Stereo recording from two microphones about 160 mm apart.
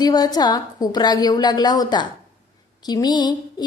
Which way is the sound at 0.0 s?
25° left (ahead or behind).